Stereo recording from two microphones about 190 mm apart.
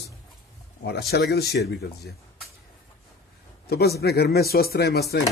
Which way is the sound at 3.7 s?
55° left (ahead or behind).